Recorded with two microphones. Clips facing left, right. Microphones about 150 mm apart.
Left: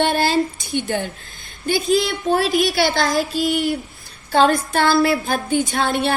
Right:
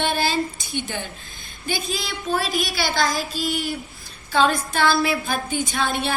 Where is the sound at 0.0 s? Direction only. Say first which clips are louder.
Left 5 dB; 55° left (ahead or behind).